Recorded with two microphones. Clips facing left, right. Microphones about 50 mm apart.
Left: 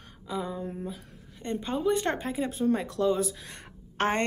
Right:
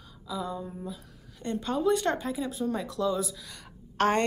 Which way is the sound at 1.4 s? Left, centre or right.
Left.